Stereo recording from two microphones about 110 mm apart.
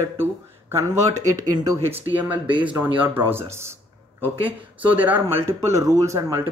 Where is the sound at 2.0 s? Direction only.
15° right (ahead or behind).